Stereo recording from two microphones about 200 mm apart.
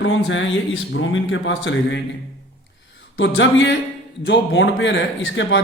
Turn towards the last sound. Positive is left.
turn(degrees=70)  # may be behind; listen again after turning